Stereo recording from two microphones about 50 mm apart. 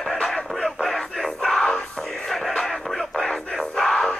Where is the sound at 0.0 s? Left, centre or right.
Centre.